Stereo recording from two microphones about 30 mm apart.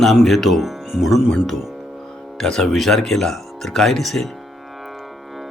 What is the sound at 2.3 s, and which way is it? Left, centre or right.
Speech, centre.